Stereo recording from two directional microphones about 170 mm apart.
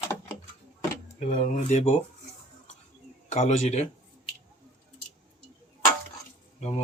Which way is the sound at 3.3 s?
40° left (ahead or behind).